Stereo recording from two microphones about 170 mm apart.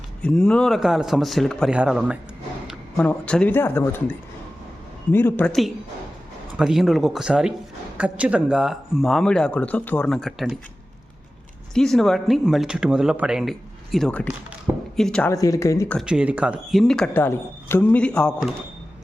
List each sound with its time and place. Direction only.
0.2 s speech: 5° left (ahead or behind)
3.0 s speech: 5° left (ahead or behind)
5.1 s speech: 10° left (ahead or behind)
5.5 s speech: centre (ahead or behind)
11.7 s speech: 5° left (ahead or behind)
15.3 s speech: 20° left (ahead or behind)
16.0 s speech: 5° right (ahead or behind)